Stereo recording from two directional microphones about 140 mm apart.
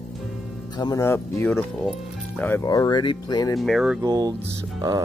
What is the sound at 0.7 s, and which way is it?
Speech, 30° left (ahead or behind).